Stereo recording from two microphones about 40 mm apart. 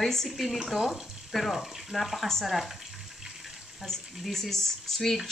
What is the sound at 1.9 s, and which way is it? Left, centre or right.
Speech, centre.